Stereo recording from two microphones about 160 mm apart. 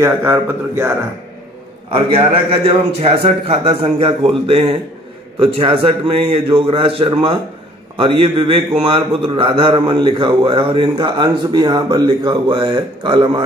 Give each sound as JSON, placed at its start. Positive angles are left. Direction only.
{"t": 0.0, "sound": "a man's voice", "side_deg": -15}
{"t": 1.9, "sound": "a man's voice", "side_deg": -35}